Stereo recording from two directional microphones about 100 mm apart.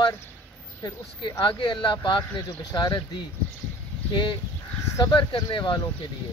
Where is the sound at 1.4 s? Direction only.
55° left (ahead or behind).